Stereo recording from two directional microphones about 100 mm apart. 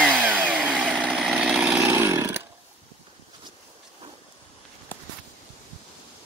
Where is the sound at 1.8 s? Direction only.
25° right (ahead or behind).